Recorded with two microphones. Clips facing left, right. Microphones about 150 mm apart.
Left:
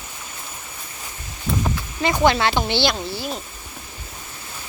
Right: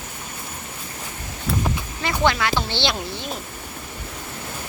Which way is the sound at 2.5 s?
15° left (ahead or behind).